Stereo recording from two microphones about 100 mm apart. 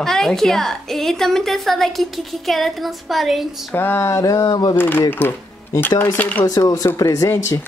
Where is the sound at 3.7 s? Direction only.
25° left (ahead or behind); by 4.8 s 40° left (ahead or behind).